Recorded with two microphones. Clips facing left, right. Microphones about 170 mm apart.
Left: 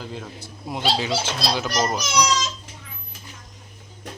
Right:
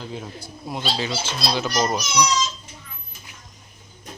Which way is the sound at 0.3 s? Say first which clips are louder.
Even; 25° left (ahead or behind).